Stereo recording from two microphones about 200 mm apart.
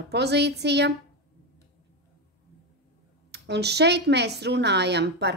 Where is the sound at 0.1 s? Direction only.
55° right (ahead or behind).